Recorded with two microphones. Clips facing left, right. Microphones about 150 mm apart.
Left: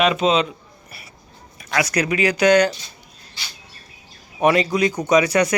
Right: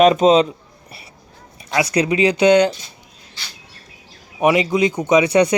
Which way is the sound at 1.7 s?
25° right (ahead or behind).